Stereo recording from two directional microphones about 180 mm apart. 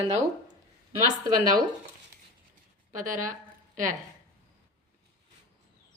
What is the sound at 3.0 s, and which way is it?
Speech, 45° right (ahead or behind).